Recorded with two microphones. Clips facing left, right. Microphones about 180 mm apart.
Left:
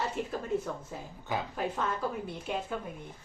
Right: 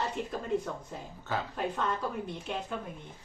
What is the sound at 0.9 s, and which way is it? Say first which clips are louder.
A woman's voice: even; 15° left (ahead or behind).